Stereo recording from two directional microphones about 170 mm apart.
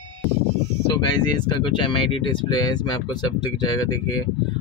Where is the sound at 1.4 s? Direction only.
30° left (ahead or behind).